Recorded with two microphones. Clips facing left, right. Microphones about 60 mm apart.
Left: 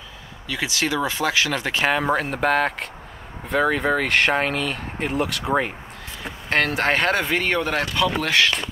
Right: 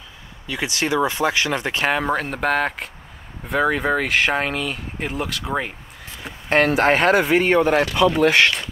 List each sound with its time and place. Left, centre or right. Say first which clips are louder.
0.7 s speech: right 1 dB; right
0.9 s speech: right 4 dB; right
1.8 s speech: left 1 dB; centre
6.5 s speech: right 4 dB; right
8.2 s speech: right 6 dB; right